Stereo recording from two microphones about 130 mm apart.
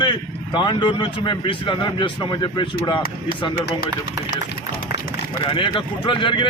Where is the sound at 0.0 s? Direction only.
35° left (ahead or behind).